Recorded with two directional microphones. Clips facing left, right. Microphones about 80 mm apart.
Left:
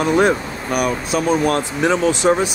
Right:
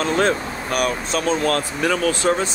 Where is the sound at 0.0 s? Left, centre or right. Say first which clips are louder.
Left 4 dB; centre.